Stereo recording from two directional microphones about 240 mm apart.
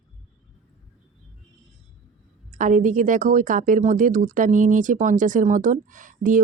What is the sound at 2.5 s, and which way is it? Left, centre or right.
A woman's voice, right.